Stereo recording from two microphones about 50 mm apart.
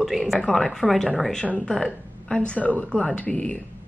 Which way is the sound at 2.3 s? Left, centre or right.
Left.